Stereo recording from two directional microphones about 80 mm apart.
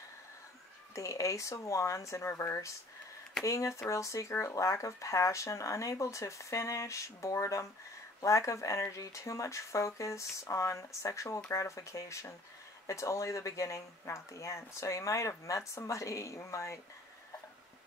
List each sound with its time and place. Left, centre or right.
0.9 s speech: left
3.4 s speech: left